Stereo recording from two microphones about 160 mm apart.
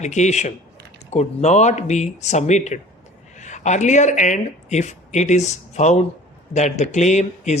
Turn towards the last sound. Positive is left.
turn(degrees=45)  # may be behind; listen again after turning